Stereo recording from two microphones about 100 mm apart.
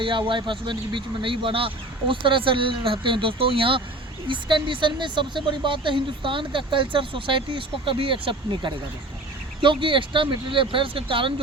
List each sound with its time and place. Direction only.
0.0 s speech: 55° right (ahead or behind)